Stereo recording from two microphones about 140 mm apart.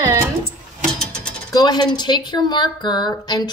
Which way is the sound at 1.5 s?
30° left (ahead or behind).